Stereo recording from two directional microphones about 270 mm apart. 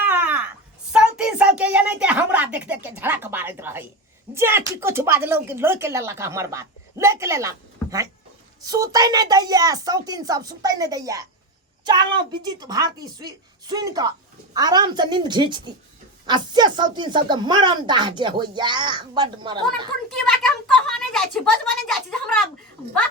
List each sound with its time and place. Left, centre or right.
0.0 s wail: centre
0.9 s speech: centre
20.7 s speech: centre